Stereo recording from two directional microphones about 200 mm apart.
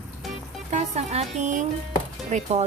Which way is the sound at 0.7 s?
35° right (ahead or behind).